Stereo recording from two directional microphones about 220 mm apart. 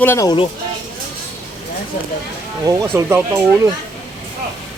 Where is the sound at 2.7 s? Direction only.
15° right (ahead or behind).